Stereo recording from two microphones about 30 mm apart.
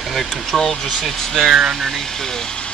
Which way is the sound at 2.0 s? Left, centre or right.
Centre.